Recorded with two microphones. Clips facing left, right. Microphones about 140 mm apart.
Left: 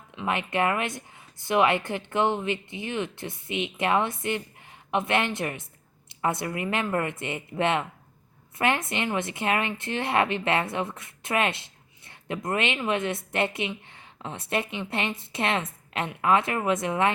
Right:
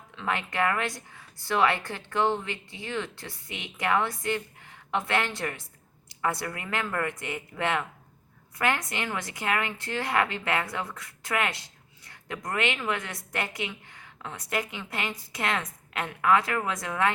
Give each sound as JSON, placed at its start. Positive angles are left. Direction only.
{"t": 0.2, "sound": "a woman's voice", "side_deg": 20}